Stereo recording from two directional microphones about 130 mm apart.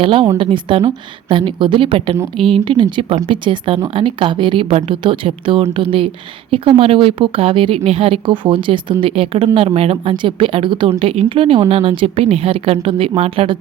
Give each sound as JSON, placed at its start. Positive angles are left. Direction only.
{"t": 0.0, "sound": "a woman's voice", "side_deg": -40}
{"t": 10.8, "sound": "a woman's voice", "side_deg": -50}